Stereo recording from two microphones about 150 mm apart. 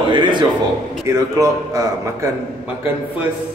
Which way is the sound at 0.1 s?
30° right (ahead or behind).